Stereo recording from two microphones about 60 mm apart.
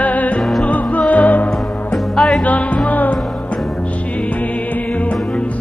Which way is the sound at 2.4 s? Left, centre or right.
Left.